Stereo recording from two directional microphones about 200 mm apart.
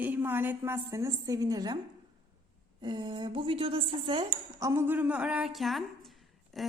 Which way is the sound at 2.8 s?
20° right (ahead or behind).